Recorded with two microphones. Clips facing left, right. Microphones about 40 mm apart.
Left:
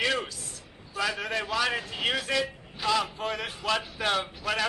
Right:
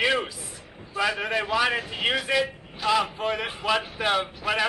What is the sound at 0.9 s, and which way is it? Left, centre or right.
Speech, centre.